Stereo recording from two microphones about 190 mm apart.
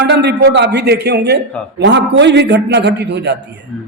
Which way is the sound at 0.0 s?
65° right (ahead or behind).